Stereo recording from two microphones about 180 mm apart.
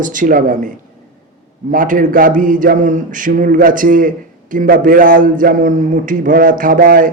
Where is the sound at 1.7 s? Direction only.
50° right (ahead or behind).